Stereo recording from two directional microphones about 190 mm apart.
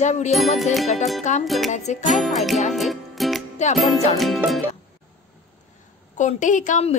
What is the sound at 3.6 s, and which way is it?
Speech, 40° left (ahead or behind).